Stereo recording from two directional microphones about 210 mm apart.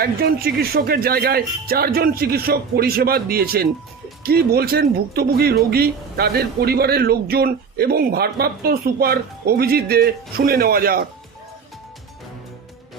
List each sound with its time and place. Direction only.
0.0 s speech: 45° right (ahead or behind)